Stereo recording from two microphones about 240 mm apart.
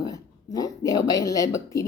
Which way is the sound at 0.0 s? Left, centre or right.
Centre.